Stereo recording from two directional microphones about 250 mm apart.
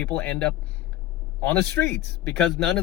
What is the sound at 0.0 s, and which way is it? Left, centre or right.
Speech, centre.